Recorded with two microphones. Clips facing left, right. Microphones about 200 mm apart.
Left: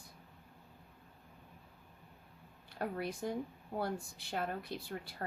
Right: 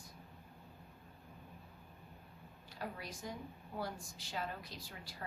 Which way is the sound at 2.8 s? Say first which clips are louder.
Left 8 dB; 55° left (ahead or behind).